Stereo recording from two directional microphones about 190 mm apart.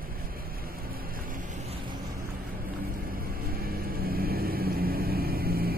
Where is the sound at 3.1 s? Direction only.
50° right (ahead or behind).